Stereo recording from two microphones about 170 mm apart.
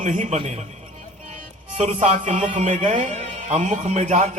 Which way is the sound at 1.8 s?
40° right (ahead or behind).